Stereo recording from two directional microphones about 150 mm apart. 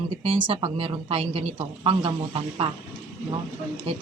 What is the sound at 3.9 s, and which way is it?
Speech, 40° right (ahead or behind).